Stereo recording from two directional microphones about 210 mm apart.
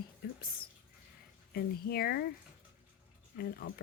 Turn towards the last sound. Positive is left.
turn(degrees=45)  # may be behind; listen again after turning